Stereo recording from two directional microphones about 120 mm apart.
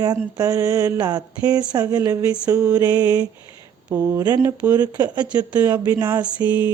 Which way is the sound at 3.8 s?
25° right (ahead or behind).